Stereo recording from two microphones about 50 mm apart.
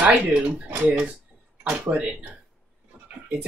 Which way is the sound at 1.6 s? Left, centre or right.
Right.